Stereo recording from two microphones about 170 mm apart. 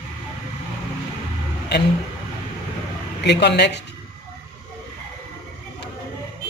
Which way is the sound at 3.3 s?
80° left.